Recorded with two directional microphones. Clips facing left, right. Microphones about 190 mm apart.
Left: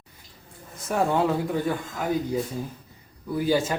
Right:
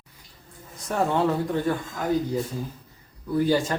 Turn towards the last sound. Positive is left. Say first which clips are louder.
# right 1 dB
turn(degrees=5)  # may be behind; listen again after turning